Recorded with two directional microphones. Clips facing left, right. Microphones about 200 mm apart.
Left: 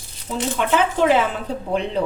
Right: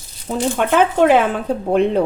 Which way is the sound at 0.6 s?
55° right (ahead or behind).